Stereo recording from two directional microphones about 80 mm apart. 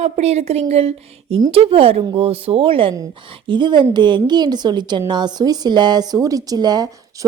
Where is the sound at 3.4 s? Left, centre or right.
Right.